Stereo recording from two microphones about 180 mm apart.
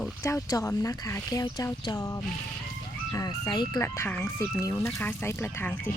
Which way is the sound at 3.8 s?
15° left (ahead or behind).